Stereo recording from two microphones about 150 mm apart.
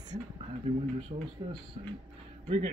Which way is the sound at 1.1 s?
55° right (ahead or behind).